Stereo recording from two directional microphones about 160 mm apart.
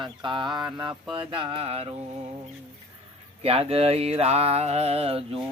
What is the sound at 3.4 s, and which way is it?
Speech, 40° right (ahead or behind).